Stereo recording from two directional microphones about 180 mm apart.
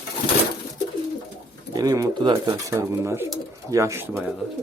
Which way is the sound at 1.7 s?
20° right (ahead or behind).